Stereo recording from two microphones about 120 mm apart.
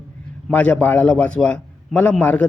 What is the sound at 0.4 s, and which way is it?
A man's voice, 10° left (ahead or behind).